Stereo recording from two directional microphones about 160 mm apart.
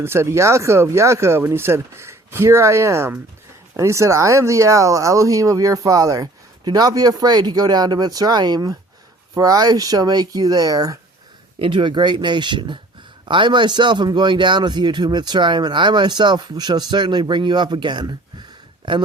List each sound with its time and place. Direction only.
0.0 s a man's voice: 15° right (ahead or behind)